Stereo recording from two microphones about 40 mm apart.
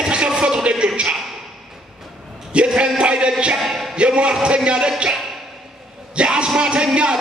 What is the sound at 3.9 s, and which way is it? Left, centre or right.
A man's voice, right.